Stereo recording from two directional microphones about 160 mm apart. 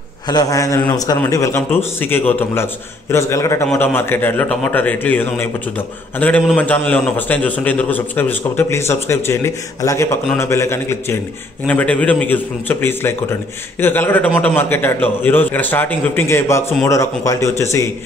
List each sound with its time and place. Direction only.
0.3 s a man's voice: 25° left (ahead or behind)